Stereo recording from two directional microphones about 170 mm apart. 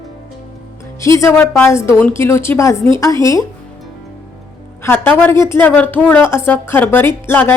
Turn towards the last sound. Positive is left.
turn(degrees=10)  # may be behind; listen again after turning